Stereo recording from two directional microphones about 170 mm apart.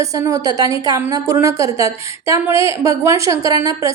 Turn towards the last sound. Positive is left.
turn(degrees=-20)  # may be behind; listen again after turning